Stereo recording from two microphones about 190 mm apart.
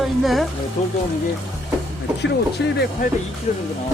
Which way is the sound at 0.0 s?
Centre (ahead or behind).